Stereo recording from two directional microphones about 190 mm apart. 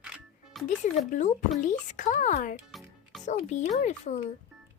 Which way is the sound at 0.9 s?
40° left (ahead or behind).